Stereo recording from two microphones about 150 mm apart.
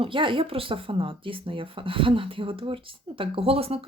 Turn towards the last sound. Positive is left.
turn(degrees=-40)  # may be behind; listen again after turning